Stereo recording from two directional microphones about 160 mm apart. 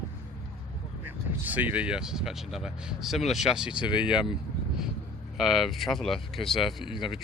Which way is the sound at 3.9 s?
30° left (ahead or behind).